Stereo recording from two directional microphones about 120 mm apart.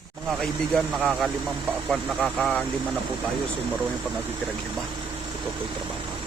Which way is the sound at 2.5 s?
10° left (ahead or behind).